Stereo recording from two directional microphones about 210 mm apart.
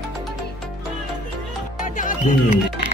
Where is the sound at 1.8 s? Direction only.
40° left (ahead or behind).